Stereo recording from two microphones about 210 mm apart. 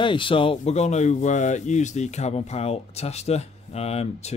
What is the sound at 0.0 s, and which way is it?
A man's voice, 25° left (ahead or behind).